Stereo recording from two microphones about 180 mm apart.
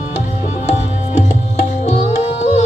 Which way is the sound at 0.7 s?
40° left (ahead or behind).